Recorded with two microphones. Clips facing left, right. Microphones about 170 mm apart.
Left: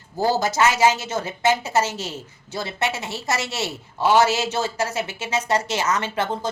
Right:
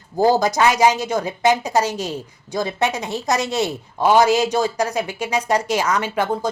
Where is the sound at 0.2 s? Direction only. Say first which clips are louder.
Right 4 dB; 15° right (ahead or behind).